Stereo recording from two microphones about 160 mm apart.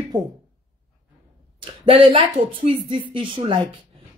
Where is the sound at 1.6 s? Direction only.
30° right (ahead or behind).